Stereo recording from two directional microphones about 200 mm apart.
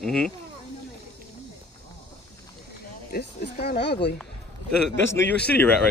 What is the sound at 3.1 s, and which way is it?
Speech, 50° left (ahead or behind).